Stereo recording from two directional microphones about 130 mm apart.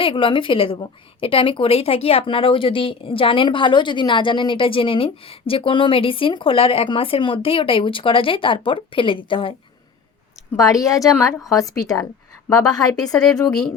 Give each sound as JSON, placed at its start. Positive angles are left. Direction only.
{"t": 0.0, "sound": "a woman's voice", "side_deg": 40}
{"t": 10.6, "sound": "a woman's voice", "side_deg": 25}
{"t": 13.1, "sound": "speech", "side_deg": 5}